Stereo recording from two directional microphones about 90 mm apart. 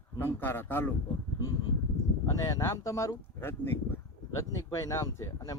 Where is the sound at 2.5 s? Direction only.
35° left (ahead or behind).